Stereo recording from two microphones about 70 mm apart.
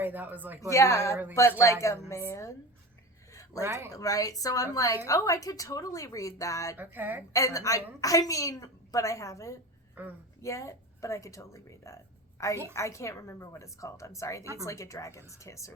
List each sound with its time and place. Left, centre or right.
0.0 s a woman's voice: right
0.7 s a woman's voice: left
3.6 s speech: right
3.9 s a woman's voice: left
6.7 s a woman's voice: right
7.3 s a woman's voice: left
10.0 s a woman's voice: right
10.4 s a woman's voice: left